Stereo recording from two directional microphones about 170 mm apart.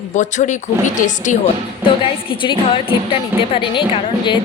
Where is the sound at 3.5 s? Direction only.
30° left (ahead or behind).